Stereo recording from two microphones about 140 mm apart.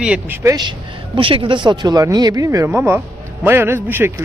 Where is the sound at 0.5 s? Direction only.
35° right (ahead or behind).